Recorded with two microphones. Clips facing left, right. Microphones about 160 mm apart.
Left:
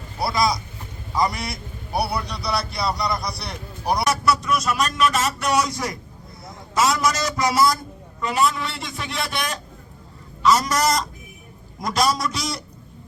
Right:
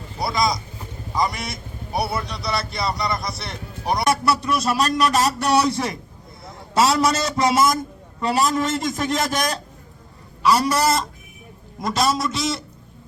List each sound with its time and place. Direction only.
0.2 s a sound: centre (ahead or behind)
1.1 s a man's voice: centre (ahead or behind)
4.3 s a man's voice: 30° right (ahead or behind)
8.2 s a man's voice: 35° right (ahead or behind)
10.6 s a man's voice: 30° right (ahead or behind)
11.8 s a man's voice: centre (ahead or behind)